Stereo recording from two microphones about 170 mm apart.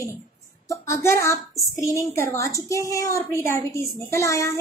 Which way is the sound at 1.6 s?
20° left (ahead or behind).